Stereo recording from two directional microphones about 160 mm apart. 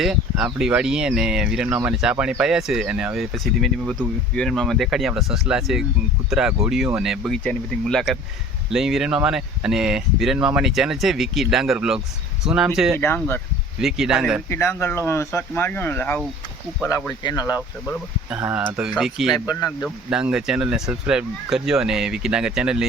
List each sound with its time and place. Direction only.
0.0 s speech: 5° right (ahead or behind)
13.0 s speech: 15° left (ahead or behind)
13.8 s speech: 5° right (ahead or behind)
14.5 s speech: 15° left (ahead or behind)
17.2 s speech: 25° left (ahead or behind)
18.3 s speech: 10° right (ahead or behind)
19.5 s speech: 20° left (ahead or behind)
20.1 s speech: 5° right (ahead or behind)